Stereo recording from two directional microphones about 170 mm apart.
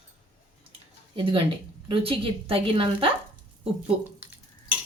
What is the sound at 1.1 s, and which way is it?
Speech, 30° right (ahead or behind).